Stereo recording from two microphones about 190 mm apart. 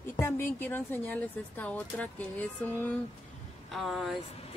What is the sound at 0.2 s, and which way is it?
A woman's voice, 10° left (ahead or behind).